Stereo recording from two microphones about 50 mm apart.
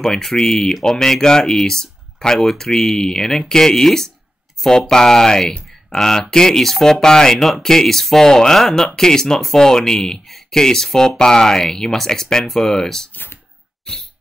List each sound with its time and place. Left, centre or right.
0.0 s speech: centre
13.1 s a sound: left
13.9 s cough: centre